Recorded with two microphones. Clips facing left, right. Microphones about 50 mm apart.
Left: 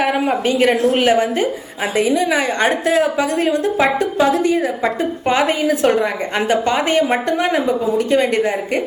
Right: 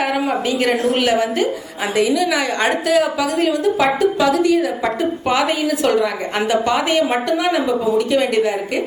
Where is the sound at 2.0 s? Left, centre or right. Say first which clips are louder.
Left 1 dB; left.